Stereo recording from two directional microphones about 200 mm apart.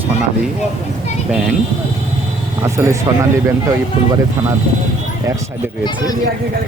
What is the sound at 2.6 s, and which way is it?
Speech, 15° right (ahead or behind).